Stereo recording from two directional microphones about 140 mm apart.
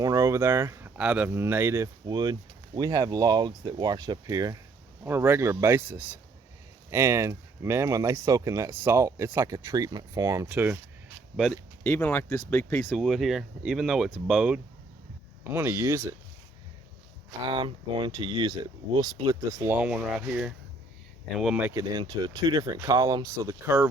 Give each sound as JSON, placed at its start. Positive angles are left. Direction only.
{"t": 0.0, "sound": "speech", "side_deg": -25}
{"t": 2.0, "sound": "speech", "side_deg": -30}
{"t": 10.5, "sound": "speech", "side_deg": -15}
{"t": 11.8, "sound": "speech", "side_deg": 15}
{"t": 13.0, "sound": "speech", "side_deg": 0}
{"t": 15.4, "sound": "speech", "side_deg": -15}
{"t": 17.4, "sound": "speech", "side_deg": -35}
{"t": 21.9, "sound": "speech", "side_deg": -30}